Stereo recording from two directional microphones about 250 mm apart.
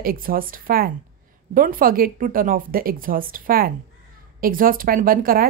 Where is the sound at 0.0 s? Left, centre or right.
Right.